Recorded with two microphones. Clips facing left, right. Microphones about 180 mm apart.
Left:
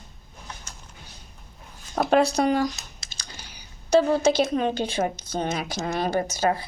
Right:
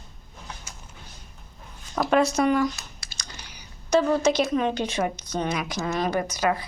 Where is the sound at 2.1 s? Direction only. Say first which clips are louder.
Even; 35° left (ahead or behind).